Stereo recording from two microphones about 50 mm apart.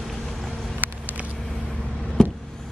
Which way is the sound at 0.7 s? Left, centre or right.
Right.